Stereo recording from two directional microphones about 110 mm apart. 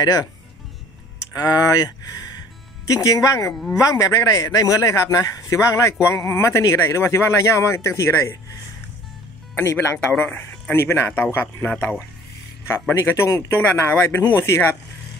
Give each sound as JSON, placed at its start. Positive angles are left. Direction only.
{"t": 0.0, "sound": "speech", "side_deg": 35}
{"t": 1.3, "sound": "a man's voice", "side_deg": 35}
{"t": 9.6, "sound": "a man's voice", "side_deg": 25}